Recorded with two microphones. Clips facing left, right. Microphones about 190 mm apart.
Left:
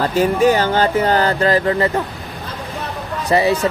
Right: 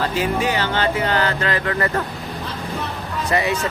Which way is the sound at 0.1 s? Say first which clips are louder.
Left 7 dB; 45° left (ahead or behind).